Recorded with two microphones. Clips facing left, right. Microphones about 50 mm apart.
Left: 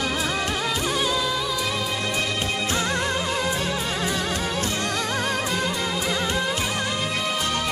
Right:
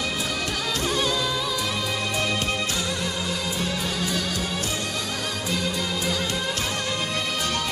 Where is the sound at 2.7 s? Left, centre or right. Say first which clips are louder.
Left 4 dB; left.